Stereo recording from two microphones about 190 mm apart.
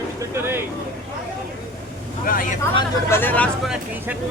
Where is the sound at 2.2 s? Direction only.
45° left (ahead or behind).